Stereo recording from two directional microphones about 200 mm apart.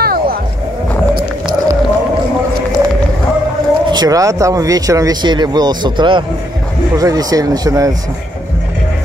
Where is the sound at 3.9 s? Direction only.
20° right (ahead or behind).